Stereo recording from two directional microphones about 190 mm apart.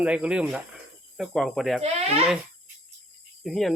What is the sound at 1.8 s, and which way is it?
Speech, 35° right (ahead or behind).